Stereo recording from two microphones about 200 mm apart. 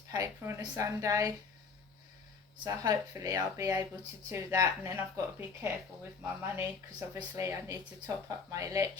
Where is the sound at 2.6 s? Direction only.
20° right (ahead or behind).